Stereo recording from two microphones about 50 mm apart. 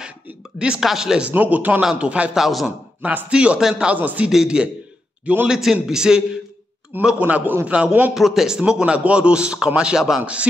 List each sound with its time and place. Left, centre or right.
0.6 s a man's voice: centre
1.3 s a man's voice: right
2.3 s a man's voice: centre
3.3 s a man's voice: right
4.0 s speech: right
4.3 s a man's voice: centre
5.2 s a man's voice: right
5.5 s a man's voice: centre
7.2 s a man's voice: right
8.1 s a man's voice: centre
8.9 s a man's voice: right
10.2 s a man's voice: right